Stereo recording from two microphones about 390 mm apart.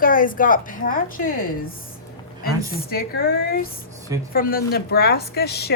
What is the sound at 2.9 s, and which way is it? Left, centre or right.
A woman's voice, left.